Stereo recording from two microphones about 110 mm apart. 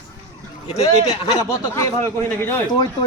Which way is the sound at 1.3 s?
25° left (ahead or behind).